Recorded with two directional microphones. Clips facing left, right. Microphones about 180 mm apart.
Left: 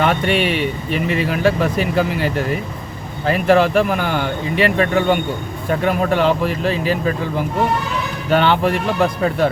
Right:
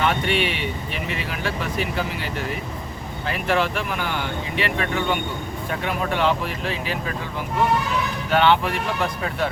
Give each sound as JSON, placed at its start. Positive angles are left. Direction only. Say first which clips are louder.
{"t": 0.0, "sound": "a sound", "louder": "left 5 dB", "side_deg": 45}
{"t": 1.1, "sound": "speech", "louder": "left 12 dB", "side_deg": 45}
{"t": 3.2, "sound": "speech", "louder": "left 9 dB", "side_deg": 40}
{"t": 8.3, "sound": "speech", "louder": "left 4 dB", "side_deg": 40}